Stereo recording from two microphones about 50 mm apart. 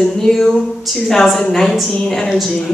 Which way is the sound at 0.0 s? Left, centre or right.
Centre.